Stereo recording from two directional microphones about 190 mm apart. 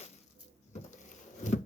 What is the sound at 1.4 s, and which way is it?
Wood, 40° left (ahead or behind).